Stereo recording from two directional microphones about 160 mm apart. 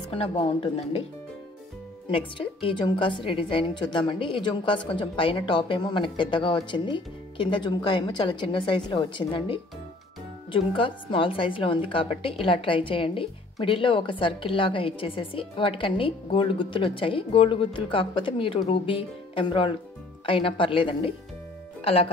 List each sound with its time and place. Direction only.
0.1 s a woman's voice: 35° left (ahead or behind)
2.0 s a woman's voice: 35° left (ahead or behind)